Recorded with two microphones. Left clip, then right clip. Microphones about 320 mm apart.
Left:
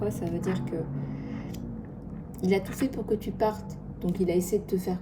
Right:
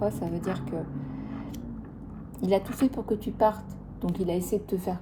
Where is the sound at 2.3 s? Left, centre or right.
Right.